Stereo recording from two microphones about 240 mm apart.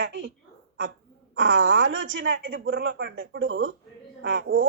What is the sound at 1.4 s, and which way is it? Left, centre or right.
A woman's voice, right.